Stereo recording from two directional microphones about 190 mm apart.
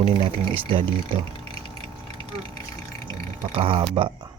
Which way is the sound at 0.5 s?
30° right (ahead or behind).